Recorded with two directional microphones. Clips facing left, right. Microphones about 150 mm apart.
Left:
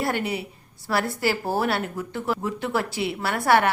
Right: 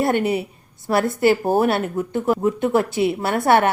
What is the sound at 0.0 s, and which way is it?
A woman's voice, 20° right (ahead or behind).